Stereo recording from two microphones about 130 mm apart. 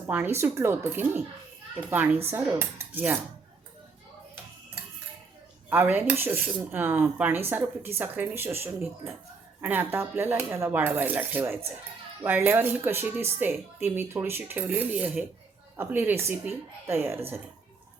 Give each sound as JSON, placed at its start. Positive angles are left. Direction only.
{"t": 0.3, "sound": "speech", "side_deg": -20}
{"t": 5.7, "sound": "speech", "side_deg": -15}